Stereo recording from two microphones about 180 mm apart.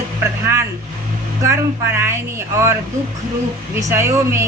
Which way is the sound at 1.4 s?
15° right (ahead or behind).